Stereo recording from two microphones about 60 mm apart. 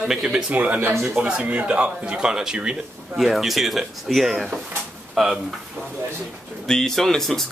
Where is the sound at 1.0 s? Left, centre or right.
Centre.